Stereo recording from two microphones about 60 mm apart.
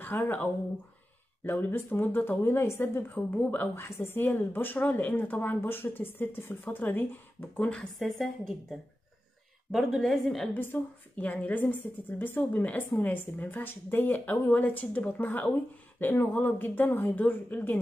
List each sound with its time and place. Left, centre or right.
0.0 s a woman's voice: left
3.7 s a woman's voice: left
8.0 s a woman's voice: centre
10.5 s a woman's voice: left